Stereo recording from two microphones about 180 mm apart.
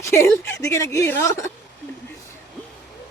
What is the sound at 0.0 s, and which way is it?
Speech, 15° left (ahead or behind).